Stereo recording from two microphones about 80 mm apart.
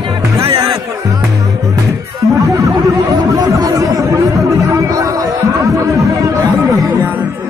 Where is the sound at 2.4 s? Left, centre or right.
Right.